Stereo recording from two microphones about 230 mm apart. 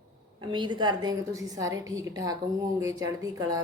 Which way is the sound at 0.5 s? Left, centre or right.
Centre.